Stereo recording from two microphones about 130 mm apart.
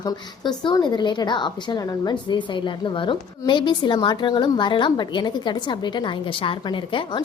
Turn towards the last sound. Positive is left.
turn(degrees=40)  # may be behind; listen again after turning